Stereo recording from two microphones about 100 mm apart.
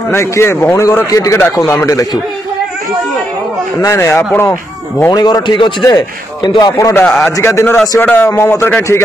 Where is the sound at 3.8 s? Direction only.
30° left (ahead or behind).